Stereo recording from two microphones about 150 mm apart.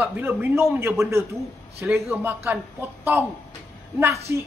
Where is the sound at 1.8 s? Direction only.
15° right (ahead or behind).